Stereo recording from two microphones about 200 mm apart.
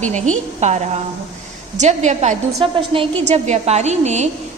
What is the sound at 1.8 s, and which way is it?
A woman's voice, 35° right (ahead or behind).